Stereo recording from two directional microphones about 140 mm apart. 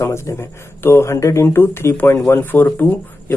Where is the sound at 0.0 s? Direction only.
20° left (ahead or behind).